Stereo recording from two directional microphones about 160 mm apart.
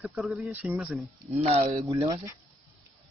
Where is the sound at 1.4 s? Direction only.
40° right (ahead or behind); by 2.3 s 25° right (ahead or behind).